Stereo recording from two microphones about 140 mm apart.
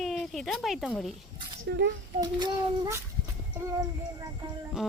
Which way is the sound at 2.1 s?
30° right (ahead or behind).